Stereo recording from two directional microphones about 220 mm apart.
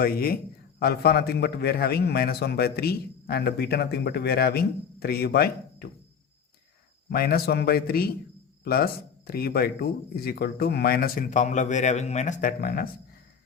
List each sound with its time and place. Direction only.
0.0 s a man's voice: 40° left (ahead or behind)
7.1 s a man's voice: 45° left (ahead or behind)